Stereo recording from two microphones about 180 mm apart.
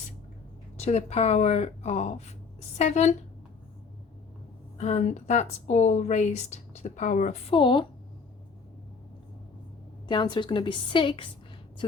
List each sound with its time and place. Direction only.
0.8 s speech: 35° left (ahead or behind)
4.8 s a woman's voice: 40° left (ahead or behind)
10.1 s a woman's voice: 25° left (ahead or behind)